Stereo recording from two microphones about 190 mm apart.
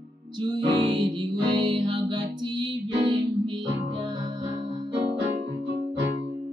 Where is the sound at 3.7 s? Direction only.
70° right (ahead or behind).